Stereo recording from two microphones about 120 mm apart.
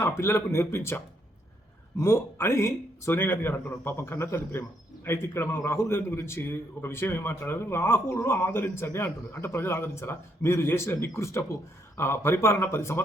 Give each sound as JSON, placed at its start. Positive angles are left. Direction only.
{"t": 0.0, "sound": "a man's voice", "side_deg": 20}